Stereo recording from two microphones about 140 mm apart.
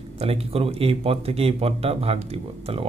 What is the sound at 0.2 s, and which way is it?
Speech, 45° right (ahead or behind).